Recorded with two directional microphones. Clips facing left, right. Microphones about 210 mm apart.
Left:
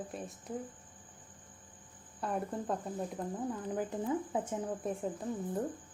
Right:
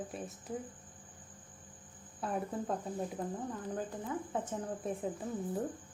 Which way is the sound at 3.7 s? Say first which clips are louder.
Left 7 dB; 20° left (ahead or behind).